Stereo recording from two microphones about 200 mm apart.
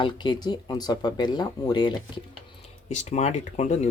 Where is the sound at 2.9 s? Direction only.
35° left (ahead or behind).